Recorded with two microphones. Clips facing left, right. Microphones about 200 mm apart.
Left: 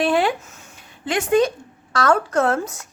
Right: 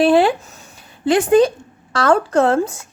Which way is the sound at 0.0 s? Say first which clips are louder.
Right 6 dB; 30° right (ahead or behind).